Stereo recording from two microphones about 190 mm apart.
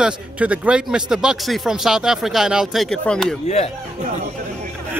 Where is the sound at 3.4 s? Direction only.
35° left (ahead or behind).